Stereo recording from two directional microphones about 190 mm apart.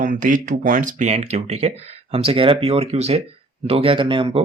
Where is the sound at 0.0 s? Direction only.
45° right (ahead or behind).